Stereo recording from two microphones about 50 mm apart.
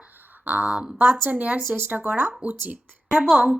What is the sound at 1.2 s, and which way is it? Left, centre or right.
Speech, right.